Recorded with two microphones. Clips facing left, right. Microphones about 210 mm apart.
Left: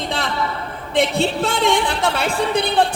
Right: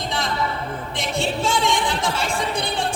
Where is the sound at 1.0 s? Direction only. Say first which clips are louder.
Left 7 dB; 60° left (ahead or behind).